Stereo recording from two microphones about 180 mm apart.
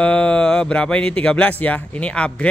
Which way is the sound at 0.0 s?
5° left (ahead or behind).